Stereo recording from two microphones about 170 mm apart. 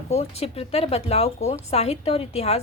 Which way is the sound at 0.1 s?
35° left (ahead or behind).